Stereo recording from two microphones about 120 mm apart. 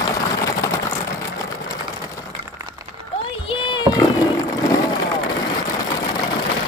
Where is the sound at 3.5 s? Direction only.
45° left (ahead or behind).